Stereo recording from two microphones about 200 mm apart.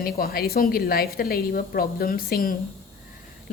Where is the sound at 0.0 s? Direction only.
50° left (ahead or behind).